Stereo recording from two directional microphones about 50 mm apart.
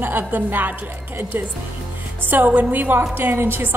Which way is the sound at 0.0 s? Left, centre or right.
Right.